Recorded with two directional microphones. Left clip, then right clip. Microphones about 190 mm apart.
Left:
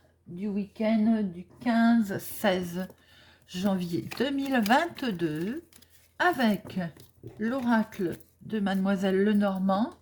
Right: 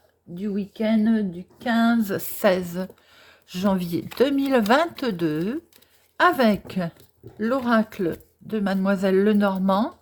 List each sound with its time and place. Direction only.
0.3 s speech: 50° right (ahead or behind)
2.4 s speech: 25° right (ahead or behind)